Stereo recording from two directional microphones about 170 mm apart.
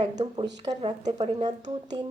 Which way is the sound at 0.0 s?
25° right (ahead or behind).